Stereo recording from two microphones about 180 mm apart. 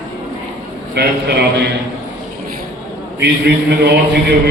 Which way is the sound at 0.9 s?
65° right (ahead or behind).